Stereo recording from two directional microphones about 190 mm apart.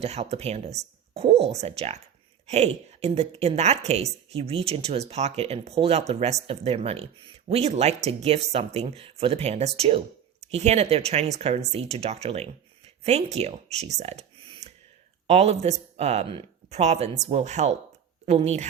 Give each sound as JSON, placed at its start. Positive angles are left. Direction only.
{"t": 0.0, "sound": "a woman's voice", "side_deg": -35}